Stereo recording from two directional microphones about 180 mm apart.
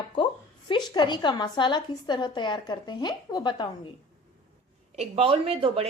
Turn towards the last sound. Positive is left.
turn(degrees=-35)  # may be behind; listen again after turning